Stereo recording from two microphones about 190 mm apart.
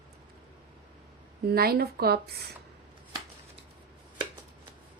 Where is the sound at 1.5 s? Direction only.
55° right (ahead or behind).